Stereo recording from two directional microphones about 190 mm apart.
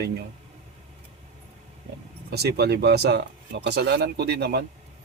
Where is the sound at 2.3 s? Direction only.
60° right (ahead or behind).